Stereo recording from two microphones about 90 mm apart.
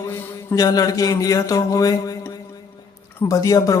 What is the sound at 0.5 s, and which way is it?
Speech, 40° left (ahead or behind).